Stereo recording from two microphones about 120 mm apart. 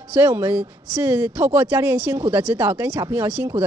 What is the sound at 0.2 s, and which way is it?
Speech, 20° right (ahead or behind).